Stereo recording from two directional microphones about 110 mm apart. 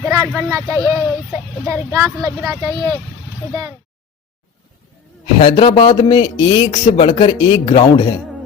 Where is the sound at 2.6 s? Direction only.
40° right (ahead or behind).